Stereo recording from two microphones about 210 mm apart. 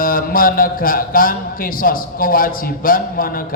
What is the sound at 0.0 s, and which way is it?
A man's voice, 40° left (ahead or behind).